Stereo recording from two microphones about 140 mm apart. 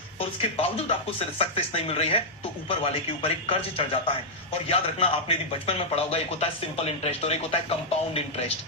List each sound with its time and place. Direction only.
0.2 s speech: 45° left (ahead or behind)